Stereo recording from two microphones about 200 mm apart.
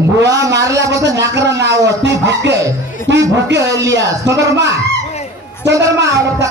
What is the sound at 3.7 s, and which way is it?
Speech, 15° right (ahead or behind).